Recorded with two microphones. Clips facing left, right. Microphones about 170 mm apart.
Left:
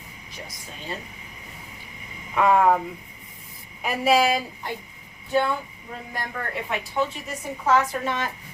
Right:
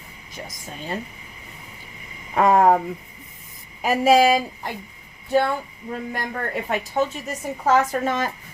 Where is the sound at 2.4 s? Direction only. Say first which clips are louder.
Right 3 dB; 40° right (ahead or behind).